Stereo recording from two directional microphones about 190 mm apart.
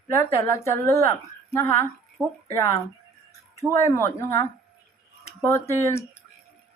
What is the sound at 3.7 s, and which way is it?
Speech, 15° left (ahead or behind).